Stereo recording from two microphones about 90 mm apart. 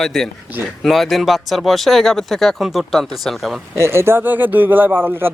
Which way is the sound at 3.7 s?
30° right (ahead or behind).